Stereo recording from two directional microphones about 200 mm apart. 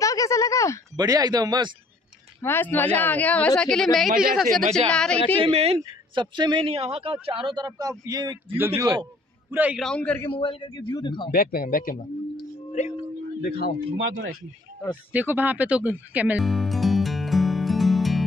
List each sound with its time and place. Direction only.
0.0 s a sound: 15° left (ahead or behind)
0.9 s a man's voice: 20° right (ahead or behind)
2.4 s a man's voice: 10° left (ahead or behind)
5.4 s a man's voice: 30° right (ahead or behind); by 10.3 s 5° left (ahead or behind)
10.3 s a man's voice: 25° left (ahead or behind)
11.3 s speech: 45° left (ahead or behind)
13.4 s speech: 50° left (ahead or behind)
13.9 s speech: 65° right (ahead or behind)
15.1 s music: 10° right (ahead or behind)